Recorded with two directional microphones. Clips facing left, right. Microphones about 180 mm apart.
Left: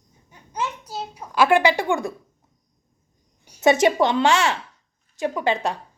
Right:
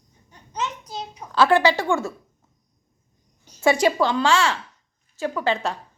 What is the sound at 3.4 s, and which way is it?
A woman's voice, 15° left (ahead or behind).